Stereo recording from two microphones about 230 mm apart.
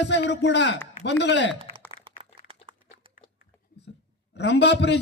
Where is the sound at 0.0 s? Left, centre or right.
Left.